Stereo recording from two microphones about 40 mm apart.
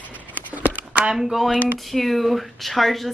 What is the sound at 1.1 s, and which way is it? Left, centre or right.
A woman's voice, centre.